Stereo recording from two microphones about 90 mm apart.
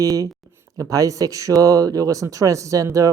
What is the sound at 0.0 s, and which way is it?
Speech, 40° right (ahead or behind).